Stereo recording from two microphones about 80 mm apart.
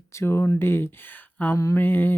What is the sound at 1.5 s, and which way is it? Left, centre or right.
Mantra, left.